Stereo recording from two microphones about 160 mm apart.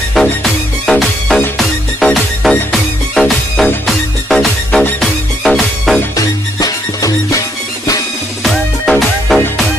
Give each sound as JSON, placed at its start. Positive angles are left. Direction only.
{"t": 0.1, "sound": "music", "side_deg": 0}
{"t": 6.1, "sound": "music", "side_deg": 20}
{"t": 8.5, "sound": "music", "side_deg": 0}